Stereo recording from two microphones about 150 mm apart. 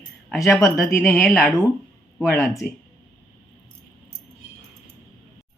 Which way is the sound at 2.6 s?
80° left.